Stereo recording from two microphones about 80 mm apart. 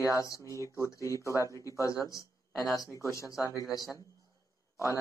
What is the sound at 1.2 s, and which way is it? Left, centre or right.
Speech, right.